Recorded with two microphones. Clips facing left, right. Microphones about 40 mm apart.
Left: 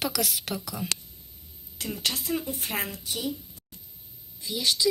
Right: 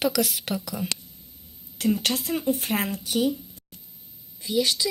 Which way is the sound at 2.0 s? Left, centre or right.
Right.